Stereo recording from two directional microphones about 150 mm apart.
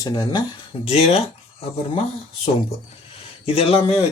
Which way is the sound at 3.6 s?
40° left (ahead or behind).